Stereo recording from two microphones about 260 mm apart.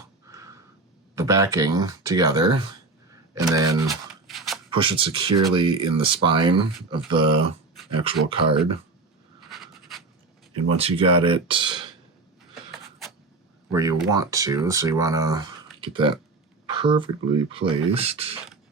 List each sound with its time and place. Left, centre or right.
0.3 s a sound: centre
1.1 s speech: centre
4.1 s a sound: centre
4.7 s speech: centre
9.5 s writing: centre
10.7 s speech: right
13.7 s speech: centre
16.6 s a sound: centre
17.7 s speech: right